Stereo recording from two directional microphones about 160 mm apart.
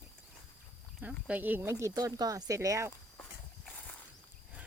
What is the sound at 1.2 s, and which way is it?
Speech, 10° right (ahead or behind).